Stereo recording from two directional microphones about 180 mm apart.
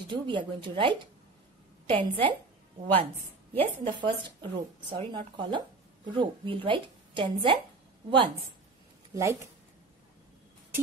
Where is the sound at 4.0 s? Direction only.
25° right (ahead or behind).